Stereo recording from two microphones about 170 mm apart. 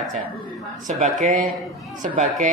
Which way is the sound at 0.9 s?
40° right (ahead or behind).